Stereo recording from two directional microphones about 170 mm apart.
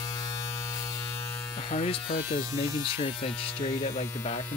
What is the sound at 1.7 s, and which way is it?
Speech, 45° left (ahead or behind).